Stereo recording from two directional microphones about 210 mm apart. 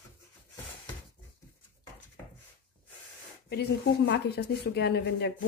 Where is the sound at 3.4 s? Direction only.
50° left (ahead or behind).